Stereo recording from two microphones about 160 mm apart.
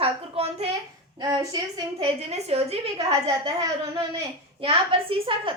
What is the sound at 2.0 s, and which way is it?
A woman's voice, 40° right (ahead or behind).